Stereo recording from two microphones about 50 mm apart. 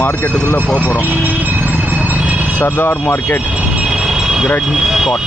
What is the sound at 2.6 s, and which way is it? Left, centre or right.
Speech, left.